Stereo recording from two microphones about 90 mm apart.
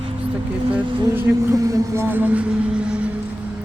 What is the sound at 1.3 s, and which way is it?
Speech, 40° right (ahead or behind).